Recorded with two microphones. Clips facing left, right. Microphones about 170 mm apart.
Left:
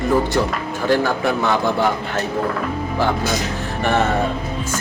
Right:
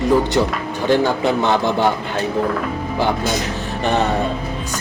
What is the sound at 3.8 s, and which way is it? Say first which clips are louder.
Speech: even; 20° right (ahead or behind).